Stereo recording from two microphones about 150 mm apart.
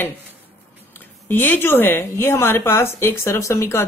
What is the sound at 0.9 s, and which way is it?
Speech, 15° left (ahead or behind).